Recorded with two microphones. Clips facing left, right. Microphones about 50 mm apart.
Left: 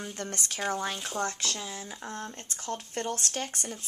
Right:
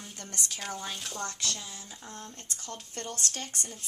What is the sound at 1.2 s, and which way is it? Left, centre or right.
Speech, left.